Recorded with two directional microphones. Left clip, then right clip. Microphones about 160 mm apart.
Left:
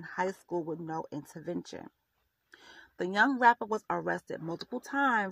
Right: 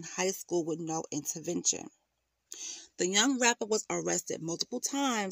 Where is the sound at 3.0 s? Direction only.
60° right (ahead or behind).